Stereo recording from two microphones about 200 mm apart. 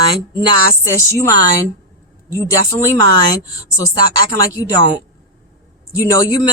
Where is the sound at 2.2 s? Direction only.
15° left (ahead or behind).